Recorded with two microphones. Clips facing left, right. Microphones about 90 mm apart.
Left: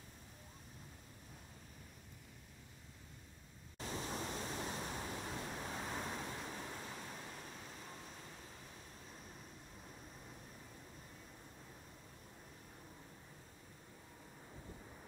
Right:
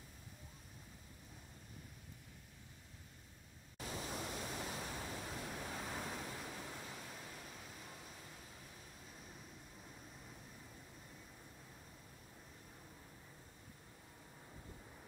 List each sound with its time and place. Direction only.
3.7 s pink noise: 30° left (ahead or behind)